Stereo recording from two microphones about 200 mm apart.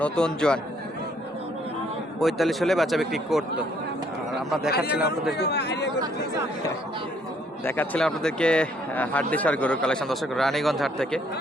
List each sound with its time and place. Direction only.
0.0 s speech: 5° left (ahead or behind)
2.1 s speech: centre (ahead or behind)
5.3 s speech: 55° left (ahead or behind)
7.6 s speech: 10° left (ahead or behind)